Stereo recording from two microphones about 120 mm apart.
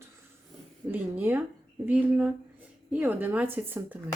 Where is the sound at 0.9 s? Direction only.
15° right (ahead or behind).